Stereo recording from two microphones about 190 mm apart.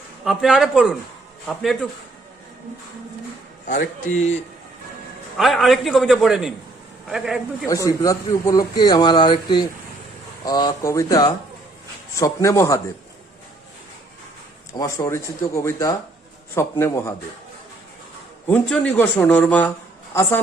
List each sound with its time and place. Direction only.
0.3 s a man's voice: centre (ahead or behind)
3.7 s speech: 40° left (ahead or behind)
5.4 s a man's voice: centre (ahead or behind)
7.7 s speech: 15° left (ahead or behind)
14.7 s speech: 15° left (ahead or behind)
18.4 s speech: 5° left (ahead or behind)